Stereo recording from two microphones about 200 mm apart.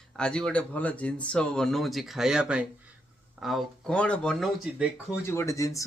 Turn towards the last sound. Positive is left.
turn(degrees=15)  # may be behind; listen again after turning